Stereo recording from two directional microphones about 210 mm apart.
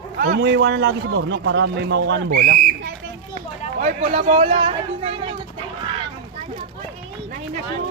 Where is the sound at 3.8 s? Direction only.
30° right (ahead or behind).